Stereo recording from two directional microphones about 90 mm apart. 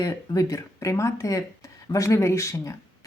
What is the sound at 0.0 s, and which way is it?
Speech, 45° left (ahead or behind).